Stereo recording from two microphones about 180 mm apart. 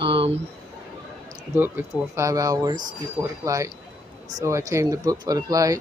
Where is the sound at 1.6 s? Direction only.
15° right (ahead or behind).